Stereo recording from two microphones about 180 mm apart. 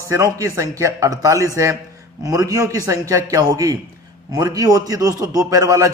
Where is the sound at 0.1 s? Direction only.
15° right (ahead or behind).